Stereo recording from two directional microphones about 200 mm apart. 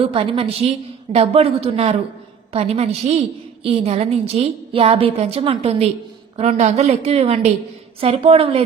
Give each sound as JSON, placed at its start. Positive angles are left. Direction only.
{"t": 0.0, "sound": "a woman's voice", "side_deg": -30}